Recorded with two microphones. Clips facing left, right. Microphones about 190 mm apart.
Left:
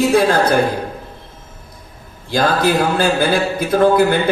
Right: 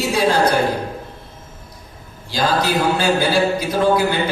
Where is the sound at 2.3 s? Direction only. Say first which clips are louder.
Left 3 dB; 55° left (ahead or behind).